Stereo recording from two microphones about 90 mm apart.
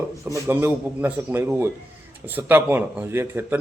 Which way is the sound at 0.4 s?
20° right (ahead or behind).